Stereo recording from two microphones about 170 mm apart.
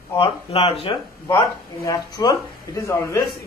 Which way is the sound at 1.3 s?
20° left (ahead or behind).